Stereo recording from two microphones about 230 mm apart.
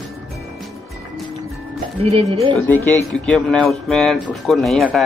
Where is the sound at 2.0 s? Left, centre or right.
Right.